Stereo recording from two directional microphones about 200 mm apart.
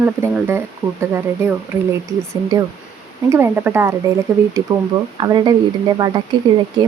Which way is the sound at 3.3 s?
10° right (ahead or behind).